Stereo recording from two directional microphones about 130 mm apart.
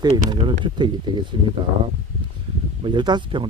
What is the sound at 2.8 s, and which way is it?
Speech, 35° right (ahead or behind).